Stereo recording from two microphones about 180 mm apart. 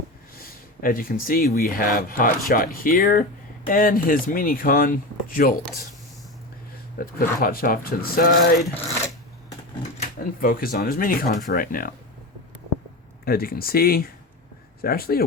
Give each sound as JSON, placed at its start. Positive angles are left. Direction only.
{"t": 0.3, "sound": "speech", "side_deg": 50}
{"t": 7.0, "sound": "speech", "side_deg": 55}
{"t": 10.2, "sound": "speech", "side_deg": 55}
{"t": 13.2, "sound": "speech", "side_deg": 55}